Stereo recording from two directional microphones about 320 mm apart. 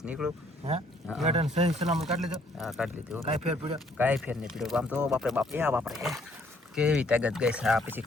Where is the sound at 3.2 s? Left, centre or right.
Centre.